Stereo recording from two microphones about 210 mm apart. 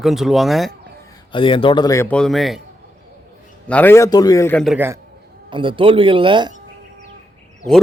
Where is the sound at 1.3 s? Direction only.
25° left (ahead or behind); by 2.6 s centre (ahead or behind).